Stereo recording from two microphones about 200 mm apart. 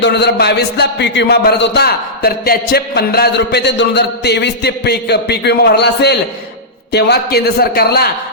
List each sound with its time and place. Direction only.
0.0 s a man's voice: 55° left (ahead or behind)